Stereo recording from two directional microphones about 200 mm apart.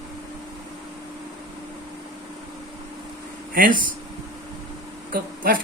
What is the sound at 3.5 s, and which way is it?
Speech, 45° right (ahead or behind).